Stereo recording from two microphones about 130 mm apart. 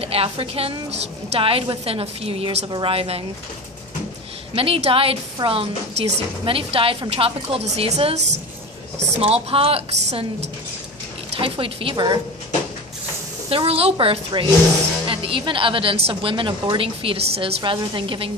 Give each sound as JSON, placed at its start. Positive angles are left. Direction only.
{"t": 0.0, "sound": "a woman's voice", "side_deg": -50}
{"t": 2.6, "sound": "a woman's voice", "side_deg": -40}
{"t": 4.5, "sound": "a woman's voice", "side_deg": -45}
{"t": 9.2, "sound": "a woman's voice", "side_deg": -45}
{"t": 11.3, "sound": "a woman's voice", "side_deg": -45}
{"t": 13.5, "sound": "a woman's voice", "side_deg": -45}